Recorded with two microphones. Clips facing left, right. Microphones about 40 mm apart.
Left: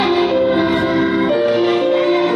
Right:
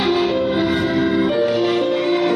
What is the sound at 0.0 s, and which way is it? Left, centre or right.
Music, centre.